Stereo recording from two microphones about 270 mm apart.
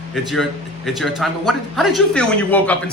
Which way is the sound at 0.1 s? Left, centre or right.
Centre.